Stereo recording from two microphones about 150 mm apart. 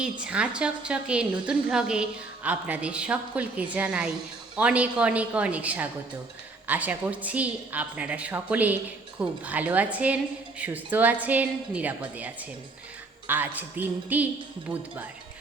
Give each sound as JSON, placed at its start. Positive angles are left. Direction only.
{"t": 0.0, "sound": "a woman's voice", "side_deg": -5}
{"t": 14.7, "sound": "speech", "side_deg": -30}